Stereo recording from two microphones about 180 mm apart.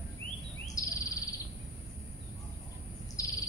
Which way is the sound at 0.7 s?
20° left (ahead or behind).